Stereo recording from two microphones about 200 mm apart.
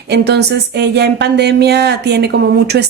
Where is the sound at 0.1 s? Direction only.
55° right (ahead or behind).